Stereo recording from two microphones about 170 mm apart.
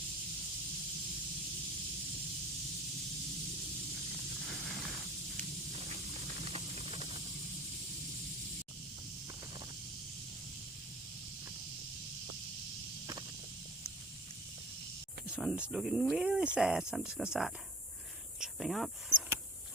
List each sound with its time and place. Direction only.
6.4 s steam: 35° right (ahead or behind)
15.3 s speech: 5° right (ahead or behind)
18.3 s a sound: centre (ahead or behind)